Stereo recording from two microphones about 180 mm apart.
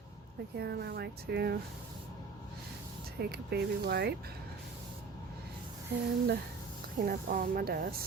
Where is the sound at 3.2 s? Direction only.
60° right (ahead or behind).